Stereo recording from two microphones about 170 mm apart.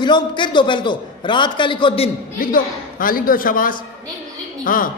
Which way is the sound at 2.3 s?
55° left (ahead or behind).